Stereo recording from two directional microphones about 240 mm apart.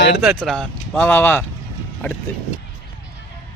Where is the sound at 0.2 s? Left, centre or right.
Centre.